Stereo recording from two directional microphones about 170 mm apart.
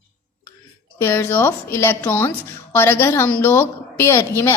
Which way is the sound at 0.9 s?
15° left (ahead or behind).